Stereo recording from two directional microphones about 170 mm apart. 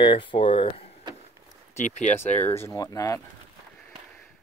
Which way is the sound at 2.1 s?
10° left (ahead or behind).